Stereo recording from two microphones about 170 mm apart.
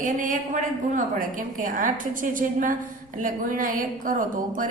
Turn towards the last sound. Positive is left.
turn(degrees=-50)  # may be behind; listen again after turning